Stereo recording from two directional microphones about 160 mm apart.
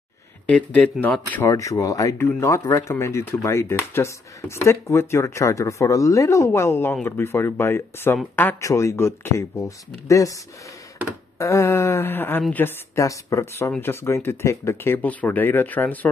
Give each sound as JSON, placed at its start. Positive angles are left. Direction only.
{"t": 0.5, "sound": "speech", "side_deg": 5}
{"t": 11.3, "sound": "speech", "side_deg": 20}